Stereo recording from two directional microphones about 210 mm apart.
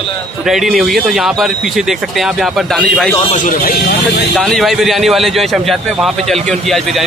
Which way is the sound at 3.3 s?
40° left (ahead or behind).